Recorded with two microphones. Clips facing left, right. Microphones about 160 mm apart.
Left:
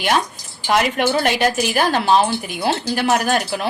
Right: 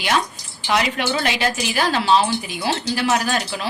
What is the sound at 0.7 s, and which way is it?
A woman's voice, 50° left (ahead or behind).